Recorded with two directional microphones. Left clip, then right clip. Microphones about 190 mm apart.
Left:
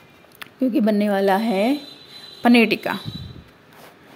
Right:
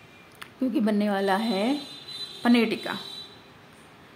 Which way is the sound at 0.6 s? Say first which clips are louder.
Left 6 dB; 25° left (ahead or behind).